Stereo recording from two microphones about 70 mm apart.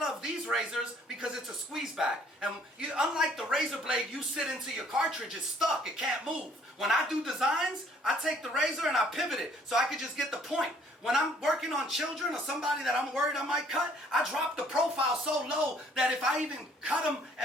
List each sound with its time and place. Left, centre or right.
0.0 s a sound: centre
1.7 s a man's voice: centre
14.7 s speech: centre